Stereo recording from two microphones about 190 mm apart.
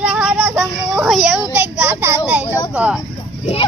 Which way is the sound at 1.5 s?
10° right (ahead or behind).